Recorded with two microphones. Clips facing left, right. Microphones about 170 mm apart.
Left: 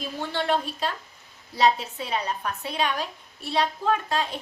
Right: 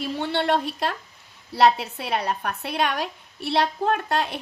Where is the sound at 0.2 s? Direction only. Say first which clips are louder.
Right 2 dB; 70° right (ahead or behind).